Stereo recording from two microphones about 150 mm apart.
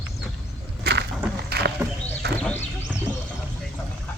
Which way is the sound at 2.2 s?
90° right.